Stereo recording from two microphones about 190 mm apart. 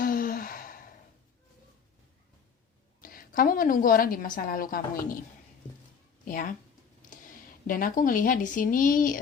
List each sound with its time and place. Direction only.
0.0 s sigh: 50° left (ahead or behind)
3.0 s a woman's voice: 50° left (ahead or behind)
6.2 s speech: 50° left (ahead or behind)